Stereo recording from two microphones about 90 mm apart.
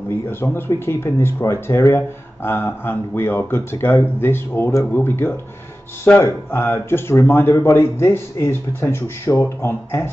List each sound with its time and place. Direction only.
0.3 s speech: 25° left (ahead or behind)